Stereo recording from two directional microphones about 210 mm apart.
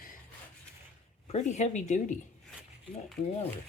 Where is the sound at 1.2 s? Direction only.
35° left (ahead or behind).